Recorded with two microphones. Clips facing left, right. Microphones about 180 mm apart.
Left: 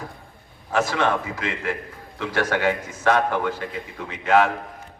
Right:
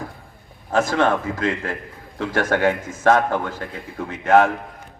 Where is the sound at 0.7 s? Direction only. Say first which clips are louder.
Right 3 dB; 50° right (ahead or behind).